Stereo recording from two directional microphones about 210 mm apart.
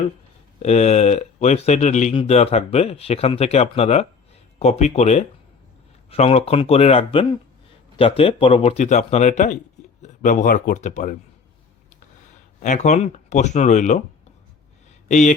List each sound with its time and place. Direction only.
0.6 s speech: 30° left (ahead or behind)
12.6 s speech: 35° left (ahead or behind)
15.0 s speech: 35° left (ahead or behind)